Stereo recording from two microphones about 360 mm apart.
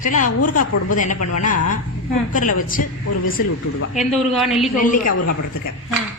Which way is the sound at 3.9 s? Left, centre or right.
Centre.